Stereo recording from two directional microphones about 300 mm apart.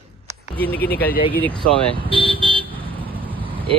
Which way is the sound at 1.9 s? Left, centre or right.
Centre.